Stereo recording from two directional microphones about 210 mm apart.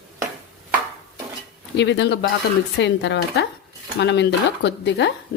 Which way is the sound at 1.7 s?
55° left (ahead or behind).